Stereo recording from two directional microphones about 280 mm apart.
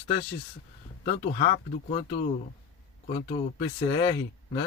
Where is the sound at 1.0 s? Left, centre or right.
Left.